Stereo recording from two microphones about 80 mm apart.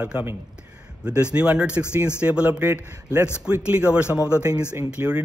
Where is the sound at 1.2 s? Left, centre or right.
Centre.